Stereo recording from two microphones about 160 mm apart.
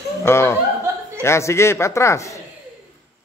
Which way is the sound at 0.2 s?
15° left (ahead or behind).